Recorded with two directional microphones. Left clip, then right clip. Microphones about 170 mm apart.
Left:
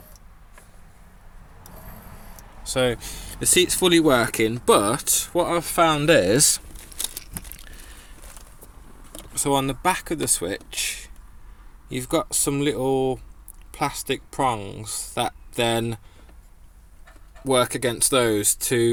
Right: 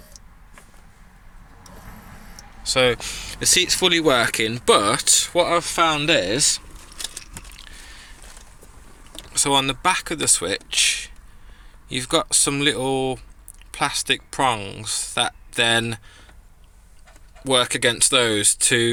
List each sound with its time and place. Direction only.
2.6 s speech: 10° left (ahead or behind)
4.1 s speech: 10° left (ahead or behind)
5.5 s speech: 45° left (ahead or behind); by 6.6 s 60° left (ahead or behind)
7.6 s a sound: 35° left (ahead or behind)
9.1 s speech: 15° left (ahead or behind)
17.4 s speech: 5° left (ahead or behind)